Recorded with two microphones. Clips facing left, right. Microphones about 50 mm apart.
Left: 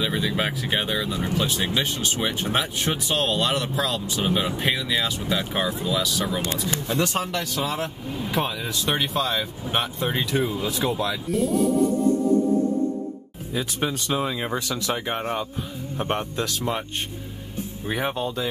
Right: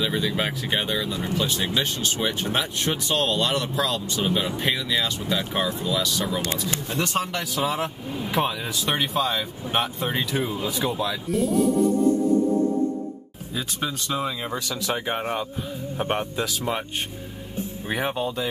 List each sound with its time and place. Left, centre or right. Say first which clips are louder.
0.0 s speech: even; centre
13.7 s speech: left 2 dB; left
14.2 s speech: left 2 dB; centre
14.7 s speech: even; centre
17.8 s speech: even; centre